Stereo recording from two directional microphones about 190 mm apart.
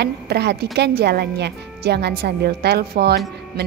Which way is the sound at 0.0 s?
60° right (ahead or behind).